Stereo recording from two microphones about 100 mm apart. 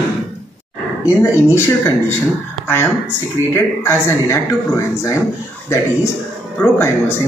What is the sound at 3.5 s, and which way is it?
Speech, 25° left (ahead or behind).